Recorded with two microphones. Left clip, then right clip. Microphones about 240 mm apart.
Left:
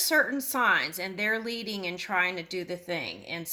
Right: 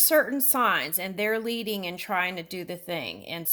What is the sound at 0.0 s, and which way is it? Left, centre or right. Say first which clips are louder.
A woman's voice: right 2 dB; right.